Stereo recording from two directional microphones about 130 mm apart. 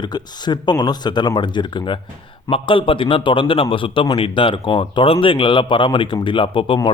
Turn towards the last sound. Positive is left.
turn(degrees=40)  # may be behind; listen again after turning